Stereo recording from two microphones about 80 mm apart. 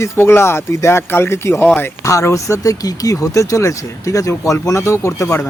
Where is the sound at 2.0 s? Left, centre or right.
Left.